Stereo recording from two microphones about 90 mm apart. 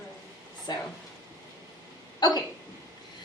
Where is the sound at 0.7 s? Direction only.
50° left (ahead or behind).